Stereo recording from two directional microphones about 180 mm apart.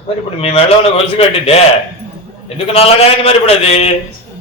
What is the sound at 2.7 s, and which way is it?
A man's voice, 30° left (ahead or behind).